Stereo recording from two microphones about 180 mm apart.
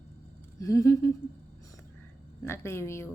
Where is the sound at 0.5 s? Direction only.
20° left (ahead or behind).